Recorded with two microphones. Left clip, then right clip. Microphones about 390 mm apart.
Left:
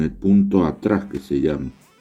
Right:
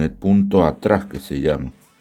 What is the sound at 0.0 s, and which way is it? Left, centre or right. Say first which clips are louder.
Speech: even; right.